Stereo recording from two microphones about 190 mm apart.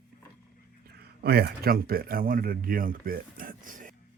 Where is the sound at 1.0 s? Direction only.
55° right (ahead or behind).